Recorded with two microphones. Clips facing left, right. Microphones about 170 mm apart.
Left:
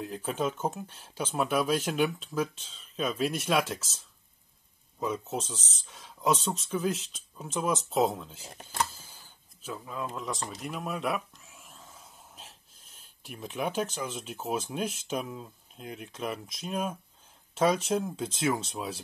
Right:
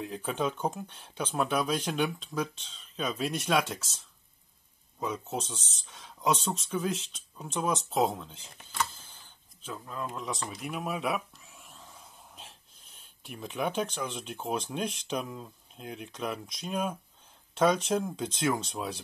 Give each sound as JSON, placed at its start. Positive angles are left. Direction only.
{"t": 0.0, "sound": "speech", "side_deg": 0}
{"t": 5.0, "sound": "speech", "side_deg": 0}
{"t": 8.5, "sound": "speech", "side_deg": 40}
{"t": 8.8, "sound": "speech", "side_deg": 5}